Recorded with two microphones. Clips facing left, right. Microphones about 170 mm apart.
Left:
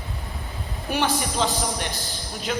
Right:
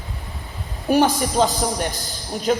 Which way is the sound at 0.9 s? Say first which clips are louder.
Right 7 dB; 40° right (ahead or behind).